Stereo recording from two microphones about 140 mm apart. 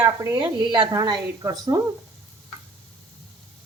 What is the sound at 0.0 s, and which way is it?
Speech, 20° right (ahead or behind).